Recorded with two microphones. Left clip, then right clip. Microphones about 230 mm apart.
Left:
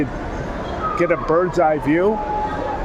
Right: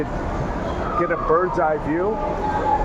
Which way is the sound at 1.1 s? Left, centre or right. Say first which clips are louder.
Even; left.